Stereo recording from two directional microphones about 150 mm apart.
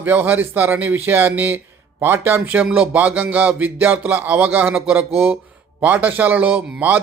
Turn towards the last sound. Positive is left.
turn(degrees=-10)  # may be behind; listen again after turning